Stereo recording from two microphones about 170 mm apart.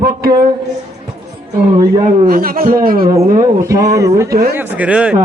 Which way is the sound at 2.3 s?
60° right (ahead or behind).